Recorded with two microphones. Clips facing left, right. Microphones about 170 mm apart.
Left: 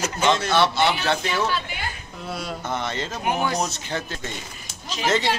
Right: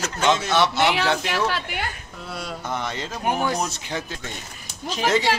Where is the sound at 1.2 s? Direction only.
80° right.